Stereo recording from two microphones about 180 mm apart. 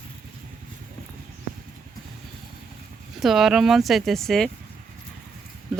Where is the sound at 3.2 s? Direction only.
Centre (ahead or behind).